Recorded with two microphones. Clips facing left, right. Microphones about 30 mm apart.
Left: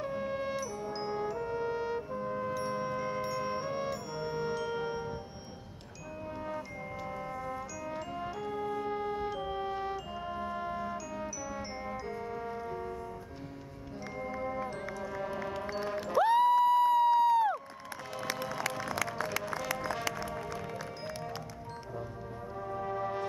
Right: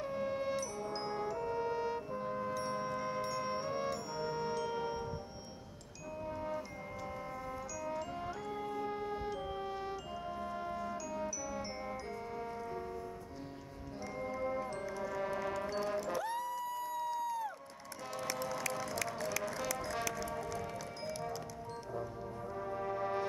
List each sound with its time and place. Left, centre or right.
0.0 s music: centre
6.2 s music: centre
7.3 s chime: centre
8.0 s music: centre
16.2 s music: left
19.1 s music: left
20.2 s music: left
22.6 s brass instrument: centre